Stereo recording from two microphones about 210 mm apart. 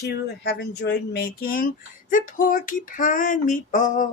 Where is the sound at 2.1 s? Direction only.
40° left (ahead or behind).